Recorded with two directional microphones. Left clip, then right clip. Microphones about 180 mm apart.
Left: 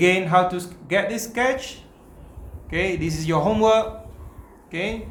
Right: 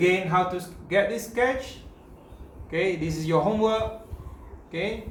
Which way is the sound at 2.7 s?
50° left (ahead or behind).